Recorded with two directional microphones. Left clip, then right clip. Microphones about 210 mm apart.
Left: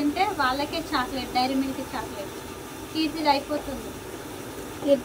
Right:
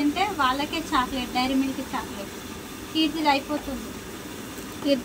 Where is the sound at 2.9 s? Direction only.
15° right (ahead or behind).